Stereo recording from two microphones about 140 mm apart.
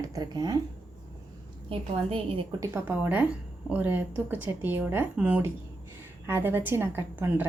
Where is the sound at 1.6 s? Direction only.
45° right (ahead or behind).